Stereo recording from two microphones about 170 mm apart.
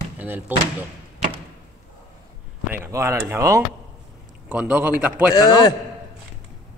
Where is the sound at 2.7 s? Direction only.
15° right (ahead or behind).